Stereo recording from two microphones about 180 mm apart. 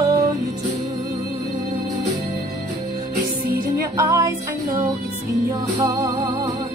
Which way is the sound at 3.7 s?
15° right (ahead or behind).